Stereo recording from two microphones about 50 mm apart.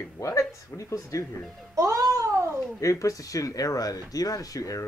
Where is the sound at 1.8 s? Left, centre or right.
Right.